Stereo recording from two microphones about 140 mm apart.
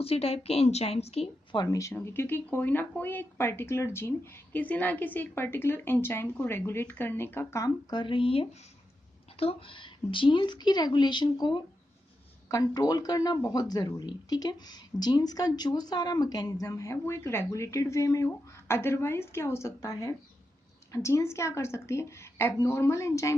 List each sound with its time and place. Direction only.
0.0 s a woman's voice: 45° left (ahead or behind)
1.6 s speech: 25° left (ahead or behind)
2.0 s a woman's voice: 15° left (ahead or behind)